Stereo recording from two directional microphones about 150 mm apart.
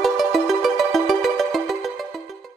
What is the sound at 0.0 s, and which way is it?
Music, centre (ahead or behind).